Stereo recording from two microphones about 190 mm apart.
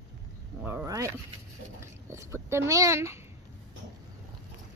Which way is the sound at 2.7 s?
15° right (ahead or behind).